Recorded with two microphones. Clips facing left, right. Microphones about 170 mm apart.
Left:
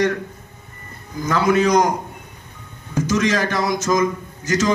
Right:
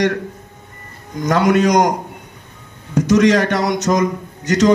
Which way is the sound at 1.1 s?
75° right (ahead or behind).